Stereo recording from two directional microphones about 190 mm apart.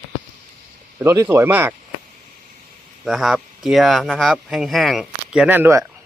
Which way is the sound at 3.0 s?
Centre (ahead or behind).